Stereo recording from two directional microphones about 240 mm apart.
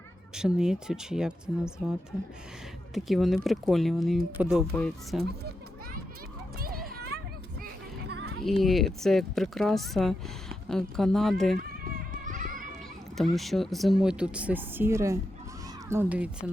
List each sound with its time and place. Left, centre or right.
0.3 s speech: centre
6.6 s children playing: right
7.6 s music: right
8.4 s speech: centre
12.1 s children playing: right
13.3 s a woman's voice: centre